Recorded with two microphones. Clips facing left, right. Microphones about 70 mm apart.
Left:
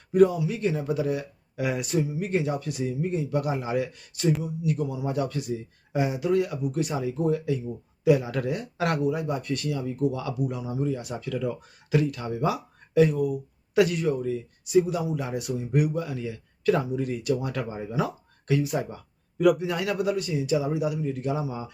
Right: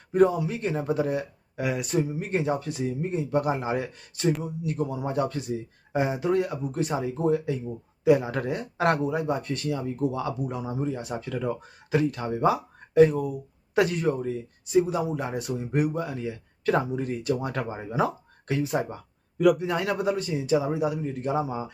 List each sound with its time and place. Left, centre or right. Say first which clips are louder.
0.1 s speech: left 1 dB; right
1.6 s speech: even; centre
2.0 s a man's voice: even; right
19.4 s speech: even; centre
19.6 s speech: right 1 dB; right